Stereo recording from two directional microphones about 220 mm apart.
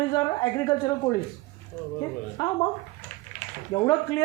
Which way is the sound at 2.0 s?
15° left (ahead or behind).